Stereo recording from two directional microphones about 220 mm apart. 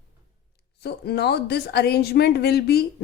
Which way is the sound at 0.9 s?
45° left (ahead or behind).